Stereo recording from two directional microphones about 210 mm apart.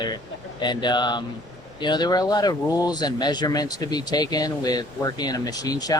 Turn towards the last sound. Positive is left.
turn(degrees=15)  # may be behind; listen again after turning